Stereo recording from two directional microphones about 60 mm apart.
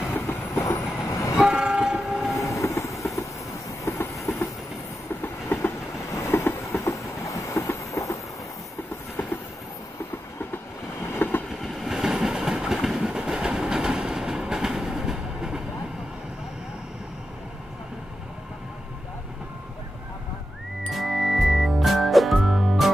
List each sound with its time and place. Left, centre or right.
0.1 s train: left
1.0 s train: left
1.3 s train: centre
2.0 s train: centre
2.3 s train: left
4.1 s train: centre
5.2 s train: left
6.1 s train: left
11.2 s train: left
11.6 s train: centre
20.9 s music: centre